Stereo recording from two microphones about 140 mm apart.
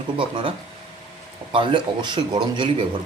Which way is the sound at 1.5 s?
35° right (ahead or behind).